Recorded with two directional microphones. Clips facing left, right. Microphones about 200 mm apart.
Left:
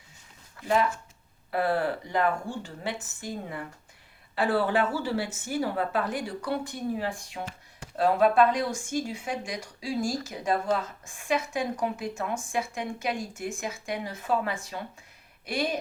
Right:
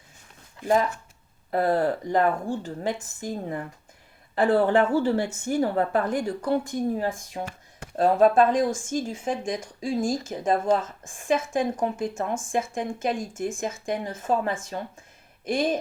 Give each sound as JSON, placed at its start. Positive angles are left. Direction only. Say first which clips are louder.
{"t": 0.6, "sound": "speech", "louder": "right 3 dB", "side_deg": -45}
{"t": 7.4, "sound": "speech", "louder": "right 3 dB", "side_deg": -50}